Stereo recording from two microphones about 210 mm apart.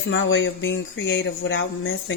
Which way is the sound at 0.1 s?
65° left (ahead or behind).